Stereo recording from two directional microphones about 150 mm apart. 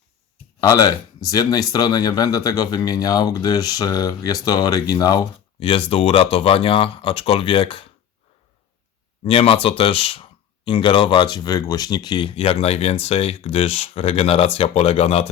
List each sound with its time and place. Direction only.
0.6 s speech: 20° left (ahead or behind)
5.5 s speech: 40° left (ahead or behind)
9.2 s speech: 40° left (ahead or behind)